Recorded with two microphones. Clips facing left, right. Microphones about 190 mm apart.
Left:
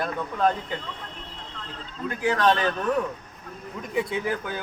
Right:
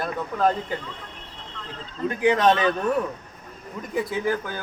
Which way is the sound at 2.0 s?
20° right (ahead or behind).